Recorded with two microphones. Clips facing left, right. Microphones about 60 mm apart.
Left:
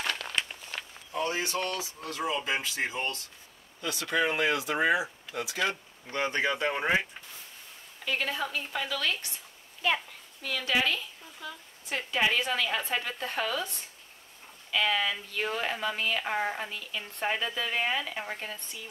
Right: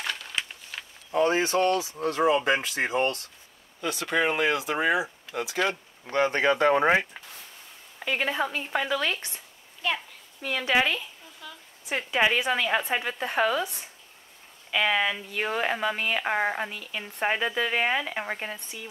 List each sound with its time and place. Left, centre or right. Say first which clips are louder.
0.4 s a sound: even; centre
1.1 s speech: right 8 dB; right
3.8 s a woman's voice: right 3 dB; right
6.6 s speech: right 7 dB; right
8.0 s a woman's voice: right 4 dB; right
9.8 s a sound: left 1 dB; centre
10.4 s a woman's voice: right 4 dB; right
11.4 s a sound: left 3 dB; centre
11.9 s a woman's voice: right 4 dB; right
14.7 s a woman's voice: right 3 dB; right